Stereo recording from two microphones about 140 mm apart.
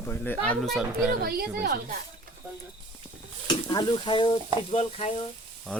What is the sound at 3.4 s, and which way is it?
Speech, 30° left (ahead or behind).